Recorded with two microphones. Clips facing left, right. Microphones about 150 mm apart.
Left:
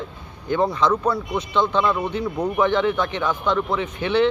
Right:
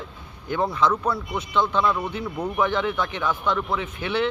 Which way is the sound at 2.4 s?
10° left (ahead or behind).